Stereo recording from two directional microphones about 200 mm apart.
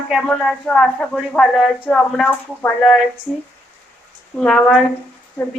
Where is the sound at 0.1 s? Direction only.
Centre (ahead or behind).